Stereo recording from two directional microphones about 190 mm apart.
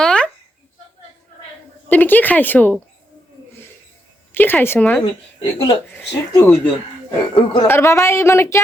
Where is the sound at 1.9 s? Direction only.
10° left (ahead or behind).